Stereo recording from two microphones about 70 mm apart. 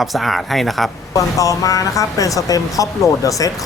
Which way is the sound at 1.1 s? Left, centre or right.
Left.